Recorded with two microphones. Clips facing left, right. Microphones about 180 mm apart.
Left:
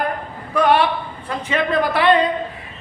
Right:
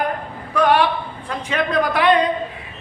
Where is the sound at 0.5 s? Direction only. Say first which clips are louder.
Even; 10° left (ahead or behind).